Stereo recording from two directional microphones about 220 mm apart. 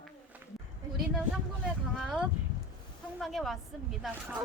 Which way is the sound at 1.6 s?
5° right (ahead or behind).